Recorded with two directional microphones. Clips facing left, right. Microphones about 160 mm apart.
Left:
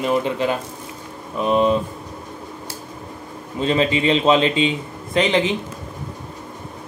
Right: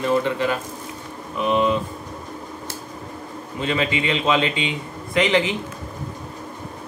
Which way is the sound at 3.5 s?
30° left (ahead or behind).